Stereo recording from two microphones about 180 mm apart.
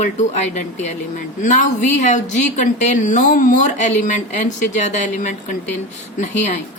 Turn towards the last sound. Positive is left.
turn(degrees=40)  # may be behind; listen again after turning